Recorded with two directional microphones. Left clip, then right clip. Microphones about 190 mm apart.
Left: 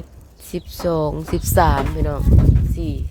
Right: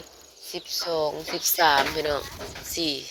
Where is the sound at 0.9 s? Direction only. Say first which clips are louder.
Left 7 dB; 40° left (ahead or behind).